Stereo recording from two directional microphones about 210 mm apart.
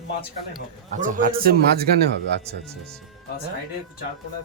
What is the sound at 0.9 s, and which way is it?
Speech, 40° right (ahead or behind).